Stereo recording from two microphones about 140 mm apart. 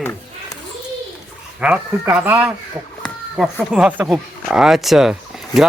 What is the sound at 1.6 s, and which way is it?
Speech, 10° right (ahead or behind).